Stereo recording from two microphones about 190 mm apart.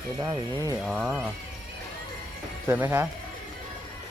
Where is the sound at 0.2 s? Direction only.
20° right (ahead or behind).